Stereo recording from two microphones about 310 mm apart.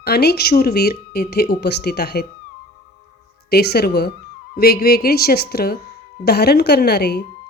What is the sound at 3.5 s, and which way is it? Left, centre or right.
A woman's voice, left.